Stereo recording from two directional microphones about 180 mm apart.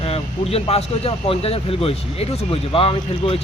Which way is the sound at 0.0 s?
35° left (ahead or behind).